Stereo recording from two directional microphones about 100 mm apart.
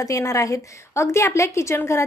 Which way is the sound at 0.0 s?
35° left (ahead or behind).